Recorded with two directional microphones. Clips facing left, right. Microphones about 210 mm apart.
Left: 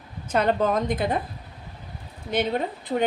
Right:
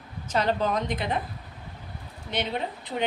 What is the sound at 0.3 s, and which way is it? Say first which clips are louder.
Speech: left 3 dB; 55° left (ahead or behind).